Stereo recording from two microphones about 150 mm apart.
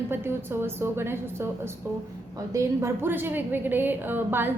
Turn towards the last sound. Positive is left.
turn(degrees=-15)  # may be behind; listen again after turning